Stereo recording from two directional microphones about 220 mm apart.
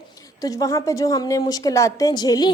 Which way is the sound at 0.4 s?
15° left (ahead or behind).